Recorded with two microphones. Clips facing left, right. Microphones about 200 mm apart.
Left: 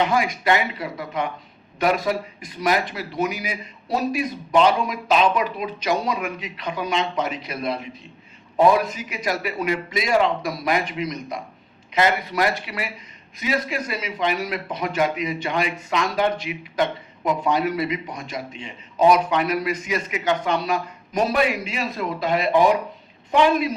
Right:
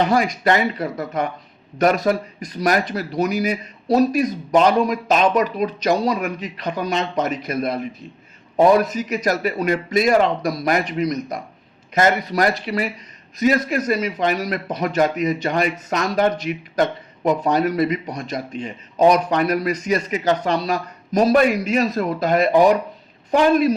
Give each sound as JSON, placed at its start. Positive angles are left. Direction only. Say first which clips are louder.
{"t": 0.0, "sound": "a man's voice", "louder": "right 3 dB", "side_deg": -40}